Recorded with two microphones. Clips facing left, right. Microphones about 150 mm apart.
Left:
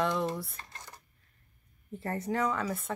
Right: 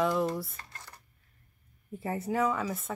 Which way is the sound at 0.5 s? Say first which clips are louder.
Left 1 dB; 20° left (ahead or behind).